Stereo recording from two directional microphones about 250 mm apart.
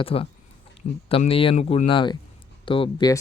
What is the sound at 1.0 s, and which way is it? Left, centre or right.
Speech, left.